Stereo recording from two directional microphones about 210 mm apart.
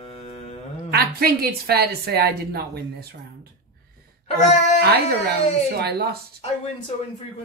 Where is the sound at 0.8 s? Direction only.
45° right (ahead or behind).